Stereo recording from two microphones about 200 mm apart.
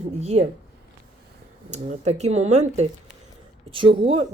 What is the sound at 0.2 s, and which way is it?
Speech, 30° right (ahead or behind).